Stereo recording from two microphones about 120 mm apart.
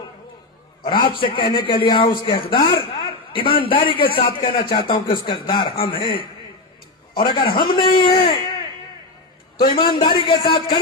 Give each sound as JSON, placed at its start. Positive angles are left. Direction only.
{"t": 0.9, "sound": "a man's voice", "side_deg": 40}
{"t": 9.6, "sound": "a man's voice", "side_deg": 40}